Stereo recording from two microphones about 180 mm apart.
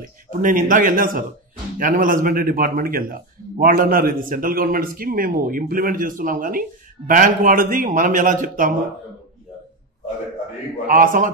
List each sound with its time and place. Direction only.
0.0 s speech: 50° right (ahead or behind)
10.9 s speech: 50° right (ahead or behind)